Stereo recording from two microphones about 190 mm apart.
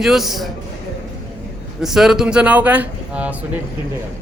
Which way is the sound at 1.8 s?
Centre (ahead or behind).